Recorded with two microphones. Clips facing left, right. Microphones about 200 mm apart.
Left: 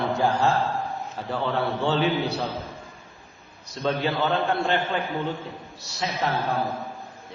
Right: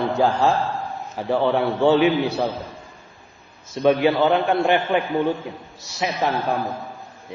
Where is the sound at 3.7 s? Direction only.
15° right (ahead or behind).